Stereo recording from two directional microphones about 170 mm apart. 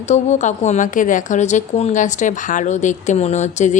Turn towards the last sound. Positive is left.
turn(degrees=45)  # may be behind; listen again after turning